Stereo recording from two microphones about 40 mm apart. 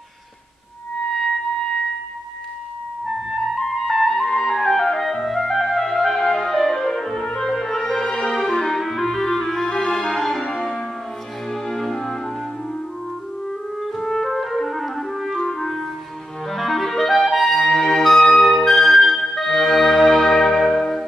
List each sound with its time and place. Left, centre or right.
3.1 s music: centre
7.3 s french horn: centre
8.3 s clarinet: centre
10.4 s church bell: centre
11.4 s music: centre
13.5 s music: centre
16.4 s clarinet: centre
17.5 s music: centre
18.5 s music: centre